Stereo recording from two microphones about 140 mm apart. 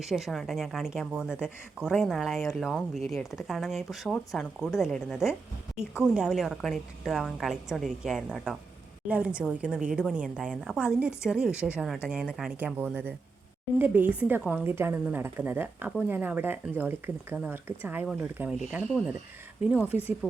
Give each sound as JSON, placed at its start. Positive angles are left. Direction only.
{"t": 0.0, "sound": "a woman's voice", "side_deg": 0}
{"t": 19.9, "sound": "speech", "side_deg": 45}